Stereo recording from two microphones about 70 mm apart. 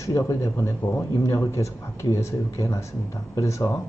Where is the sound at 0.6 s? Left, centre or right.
Left.